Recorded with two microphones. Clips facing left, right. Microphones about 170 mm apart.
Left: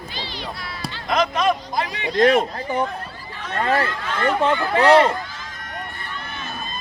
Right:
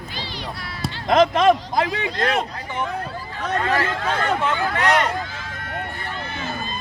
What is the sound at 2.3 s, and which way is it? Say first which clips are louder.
Speech: left 5 dB; 40° left (ahead or behind).